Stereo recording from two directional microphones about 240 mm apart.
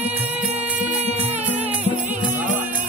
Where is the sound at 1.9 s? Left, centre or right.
Centre.